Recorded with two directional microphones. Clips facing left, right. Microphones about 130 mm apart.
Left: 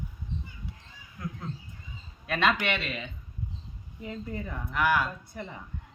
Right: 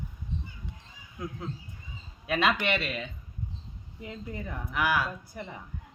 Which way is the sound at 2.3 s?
10° right (ahead or behind).